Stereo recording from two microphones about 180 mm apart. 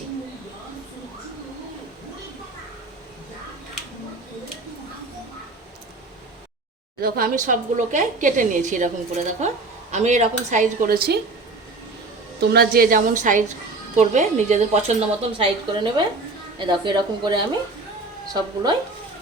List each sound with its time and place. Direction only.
7.0 s a woman's voice: 55° right (ahead or behind)
12.4 s a woman's voice: 60° right (ahead or behind); by 14.9 s 40° right (ahead or behind)
15.4 s a woman's voice: 30° right (ahead or behind)